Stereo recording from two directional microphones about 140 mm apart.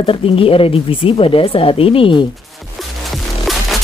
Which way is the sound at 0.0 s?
40° left (ahead or behind).